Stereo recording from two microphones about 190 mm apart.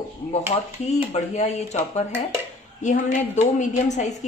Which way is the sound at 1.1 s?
35° left (ahead or behind).